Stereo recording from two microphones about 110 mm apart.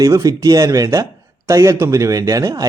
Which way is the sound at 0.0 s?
30° right (ahead or behind).